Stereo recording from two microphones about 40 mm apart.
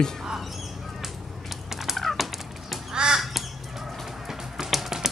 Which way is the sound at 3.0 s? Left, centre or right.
Right.